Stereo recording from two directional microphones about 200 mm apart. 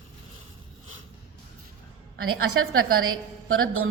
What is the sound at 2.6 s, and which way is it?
A woman's voice, 90° right.